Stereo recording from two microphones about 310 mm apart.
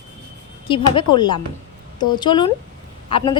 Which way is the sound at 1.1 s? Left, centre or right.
Centre.